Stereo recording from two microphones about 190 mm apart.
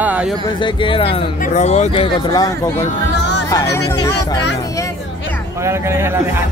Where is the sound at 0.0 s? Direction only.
5° right (ahead or behind).